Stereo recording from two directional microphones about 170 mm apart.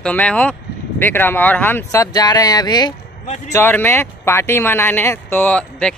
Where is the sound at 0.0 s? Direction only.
5° left (ahead or behind); by 2.9 s 25° left (ahead or behind).